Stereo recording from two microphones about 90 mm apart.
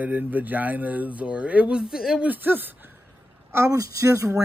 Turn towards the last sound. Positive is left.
turn(degrees=-35)  # may be behind; listen again after turning